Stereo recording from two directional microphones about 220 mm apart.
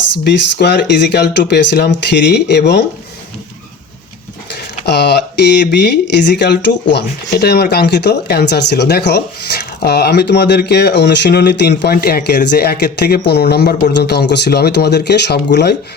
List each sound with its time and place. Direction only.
0.3 s speech: 50° left (ahead or behind)
4.5 s speech: 50° left (ahead or behind)